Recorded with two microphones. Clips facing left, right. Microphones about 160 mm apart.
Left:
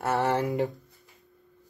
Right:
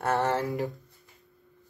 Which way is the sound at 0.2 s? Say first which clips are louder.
Left 2 dB; 15° left (ahead or behind).